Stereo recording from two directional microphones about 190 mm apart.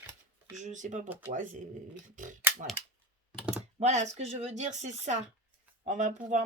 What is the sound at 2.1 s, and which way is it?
Speech, 40° right (ahead or behind).